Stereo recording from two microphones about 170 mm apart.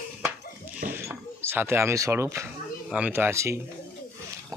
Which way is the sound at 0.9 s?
15° right (ahead or behind).